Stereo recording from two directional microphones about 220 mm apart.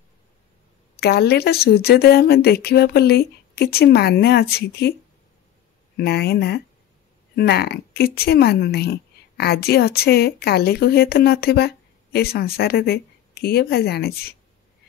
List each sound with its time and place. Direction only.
0.9 s a woman's voice: 45° left (ahead or behind)
5.9 s a woman's voice: 45° left (ahead or behind)